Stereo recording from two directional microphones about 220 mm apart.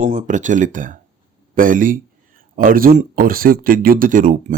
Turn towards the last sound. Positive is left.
turn(degrees=-35)  # may be behind; listen again after turning